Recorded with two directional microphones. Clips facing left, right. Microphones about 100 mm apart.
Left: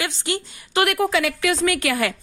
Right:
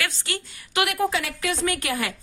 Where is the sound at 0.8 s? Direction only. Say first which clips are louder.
Left 4 dB; 75° left (ahead or behind).